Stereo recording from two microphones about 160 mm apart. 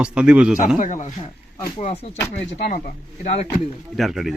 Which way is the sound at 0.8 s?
50° left (ahead or behind).